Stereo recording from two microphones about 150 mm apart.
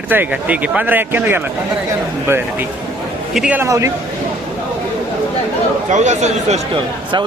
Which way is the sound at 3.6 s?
20° right (ahead or behind).